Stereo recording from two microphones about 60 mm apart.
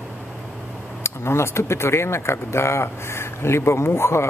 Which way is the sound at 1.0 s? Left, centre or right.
Left.